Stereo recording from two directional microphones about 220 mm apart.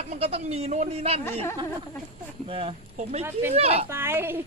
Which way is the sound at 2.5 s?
25° right (ahead or behind).